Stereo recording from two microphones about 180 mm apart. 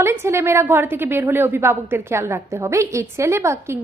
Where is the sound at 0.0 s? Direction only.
15° right (ahead or behind).